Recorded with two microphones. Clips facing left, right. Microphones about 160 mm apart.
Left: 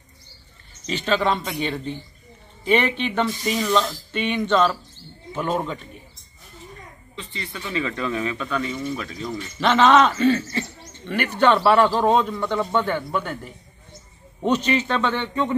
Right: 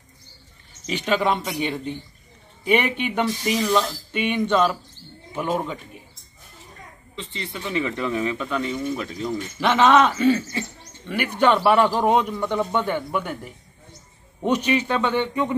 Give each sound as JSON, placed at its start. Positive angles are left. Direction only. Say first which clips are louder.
{"t": 0.8, "sound": "speech", "louder": "even", "side_deg": -15}
{"t": 7.2, "sound": "speech", "louder": "right 2 dB", "side_deg": -25}